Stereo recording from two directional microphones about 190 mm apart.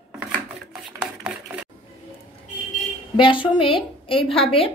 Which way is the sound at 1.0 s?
5° right (ahead or behind).